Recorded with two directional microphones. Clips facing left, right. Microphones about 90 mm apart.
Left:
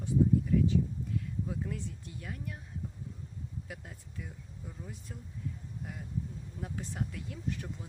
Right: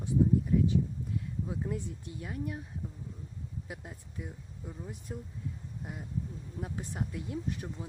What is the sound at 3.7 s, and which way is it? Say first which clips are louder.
Speech: right 2 dB; 20° right (ahead or behind).